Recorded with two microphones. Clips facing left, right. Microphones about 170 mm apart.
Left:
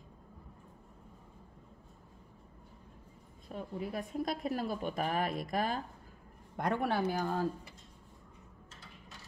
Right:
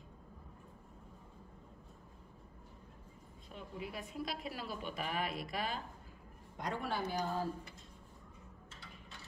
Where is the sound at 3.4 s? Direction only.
45° left (ahead or behind).